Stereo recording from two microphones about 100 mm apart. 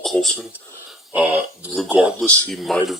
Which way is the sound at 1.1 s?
15° right (ahead or behind).